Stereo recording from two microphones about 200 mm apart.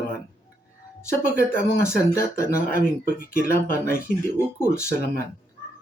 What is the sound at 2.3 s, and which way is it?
Speech, 45° left (ahead or behind).